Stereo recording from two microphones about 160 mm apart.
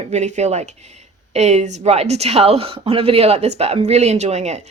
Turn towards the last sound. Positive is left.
turn(degrees=-45)  # may be behind; listen again after turning